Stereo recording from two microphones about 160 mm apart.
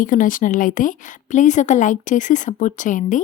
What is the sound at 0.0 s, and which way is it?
A woman's voice, 55° left (ahead or behind).